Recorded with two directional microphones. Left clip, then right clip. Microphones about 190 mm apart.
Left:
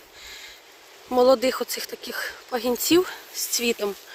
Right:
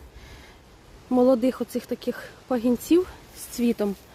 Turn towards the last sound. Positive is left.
turn(degrees=0)  # may be behind; listen again after turning